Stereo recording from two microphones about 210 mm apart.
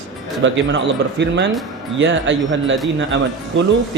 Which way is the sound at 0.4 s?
65° right (ahead or behind).